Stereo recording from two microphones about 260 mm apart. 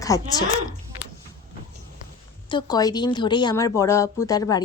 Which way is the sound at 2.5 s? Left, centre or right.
Centre.